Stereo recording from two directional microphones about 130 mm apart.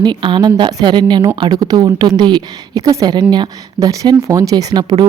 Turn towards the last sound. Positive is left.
turn(degrees=-30)  # may be behind; listen again after turning